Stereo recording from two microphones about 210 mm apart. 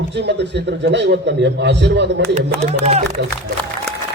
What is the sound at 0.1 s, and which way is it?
A man's voice, 55° right (ahead or behind).